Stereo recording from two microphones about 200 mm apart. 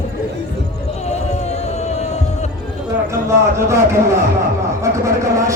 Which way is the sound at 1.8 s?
35° left (ahead or behind).